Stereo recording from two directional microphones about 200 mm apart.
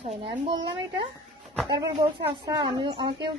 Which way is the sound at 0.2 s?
25° right (ahead or behind).